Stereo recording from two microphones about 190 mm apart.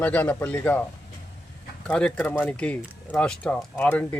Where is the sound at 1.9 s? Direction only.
5° left (ahead or behind).